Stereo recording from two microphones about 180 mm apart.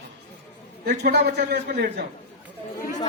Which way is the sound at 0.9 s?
65° right (ahead or behind).